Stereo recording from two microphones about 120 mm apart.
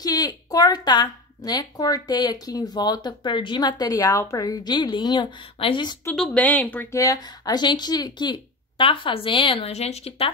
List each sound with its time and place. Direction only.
0.0 s a woman's voice: 30° left (ahead or behind)
6.1 s speech: centre (ahead or behind)
6.4 s speech: 15° left (ahead or behind)
6.9 s speech: 30° left (ahead or behind); by 10.3 s 55° left (ahead or behind)